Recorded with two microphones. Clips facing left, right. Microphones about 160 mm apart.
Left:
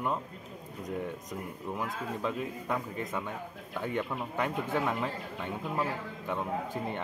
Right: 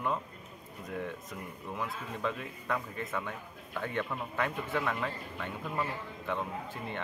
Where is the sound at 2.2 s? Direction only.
15° left (ahead or behind).